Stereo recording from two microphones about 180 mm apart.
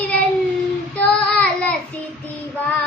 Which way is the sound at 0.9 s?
5° left (ahead or behind).